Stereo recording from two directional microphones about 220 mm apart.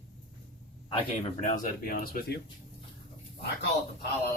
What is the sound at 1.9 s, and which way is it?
Speech, 40° left (ahead or behind).